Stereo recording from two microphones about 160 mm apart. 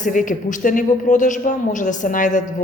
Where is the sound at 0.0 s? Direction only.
55° left (ahead or behind).